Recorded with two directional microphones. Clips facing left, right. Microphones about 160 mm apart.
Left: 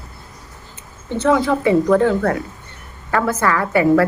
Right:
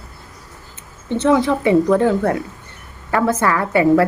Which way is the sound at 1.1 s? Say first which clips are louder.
Right 1 dB; 20° right (ahead or behind).